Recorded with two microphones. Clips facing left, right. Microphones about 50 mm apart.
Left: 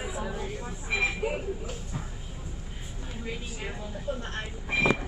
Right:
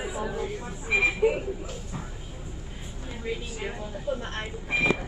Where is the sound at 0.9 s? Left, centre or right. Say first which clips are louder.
Right 6 dB; centre.